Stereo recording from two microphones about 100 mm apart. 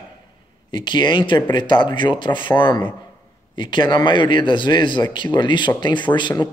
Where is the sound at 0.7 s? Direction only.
50° left (ahead or behind).